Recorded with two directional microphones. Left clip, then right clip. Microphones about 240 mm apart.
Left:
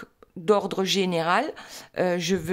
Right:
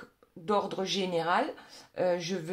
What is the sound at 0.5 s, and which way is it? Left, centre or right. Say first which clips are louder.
Speech: left 7 dB; left.